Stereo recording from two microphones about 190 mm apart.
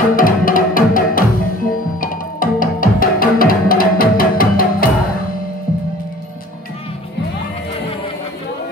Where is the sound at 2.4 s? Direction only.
45° left (ahead or behind).